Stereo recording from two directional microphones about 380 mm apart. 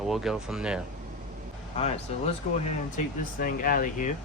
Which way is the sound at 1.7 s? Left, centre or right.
Centre.